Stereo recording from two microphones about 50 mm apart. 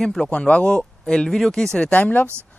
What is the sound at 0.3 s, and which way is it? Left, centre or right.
Speech, left.